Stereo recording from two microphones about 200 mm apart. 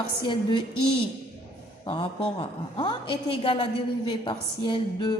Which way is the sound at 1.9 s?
25° left (ahead or behind).